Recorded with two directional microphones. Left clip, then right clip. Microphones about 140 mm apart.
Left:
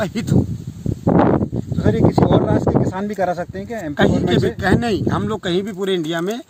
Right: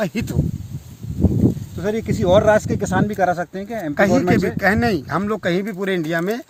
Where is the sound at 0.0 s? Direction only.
15° right (ahead or behind).